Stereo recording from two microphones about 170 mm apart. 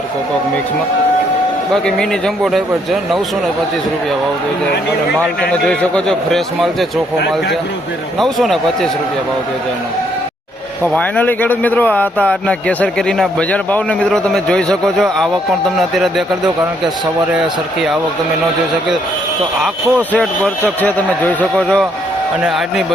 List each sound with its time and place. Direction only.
1.7 s a man's voice: 5° left (ahead or behind)
5.5 s a man's voice: 5° left (ahead or behind)
8.2 s a man's voice: centre (ahead or behind)
10.8 s a man's voice: 10° left (ahead or behind)
19.6 s speech: 5° left (ahead or behind)